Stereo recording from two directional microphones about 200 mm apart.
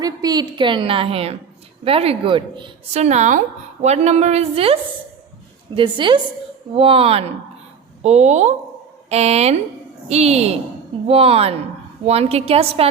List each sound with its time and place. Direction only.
0.0 s a woman's voice: 20° right (ahead or behind)